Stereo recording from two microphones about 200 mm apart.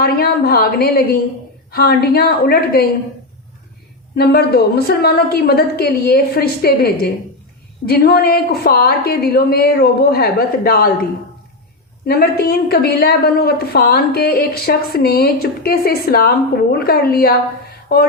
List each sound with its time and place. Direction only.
0.0 s a woman's voice: 50° left (ahead or behind)
4.2 s a woman's voice: 50° left (ahead or behind)
12.0 s a woman's voice: 50° left (ahead or behind)